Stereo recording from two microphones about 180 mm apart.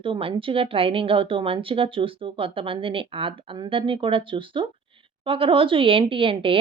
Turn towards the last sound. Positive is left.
turn(degrees=-30)  # may be behind; listen again after turning